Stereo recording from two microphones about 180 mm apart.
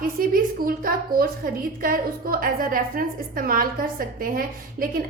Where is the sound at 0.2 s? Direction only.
55° right (ahead or behind).